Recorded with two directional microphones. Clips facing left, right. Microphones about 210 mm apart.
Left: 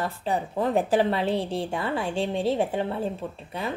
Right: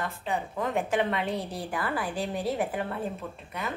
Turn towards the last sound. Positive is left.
turn(degrees=30)  # may be behind; listen again after turning